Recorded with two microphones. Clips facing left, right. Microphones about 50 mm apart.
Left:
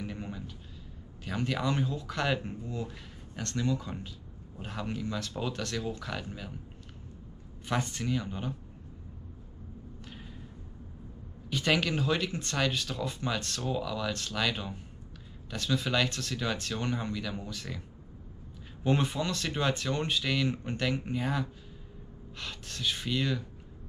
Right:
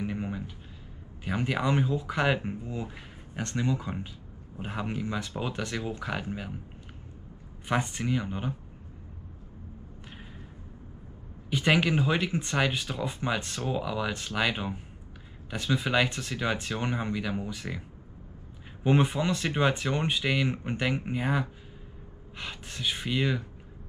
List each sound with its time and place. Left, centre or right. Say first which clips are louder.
0.0 s a sound: right 6 dB; centre
1.2 s speech: right 3 dB; centre
7.6 s speech: right 3 dB; centre
11.5 s speech: right 4 dB; centre